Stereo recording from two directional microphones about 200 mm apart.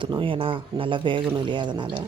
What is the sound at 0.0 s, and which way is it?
Speech, 25° right (ahead or behind).